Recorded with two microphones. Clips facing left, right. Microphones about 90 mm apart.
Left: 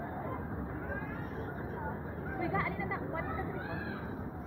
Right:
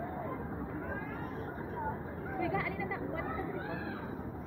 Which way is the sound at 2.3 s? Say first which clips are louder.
Even; 35° left (ahead or behind).